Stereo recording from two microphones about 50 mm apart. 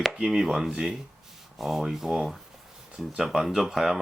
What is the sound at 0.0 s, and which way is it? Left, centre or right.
Speech, centre.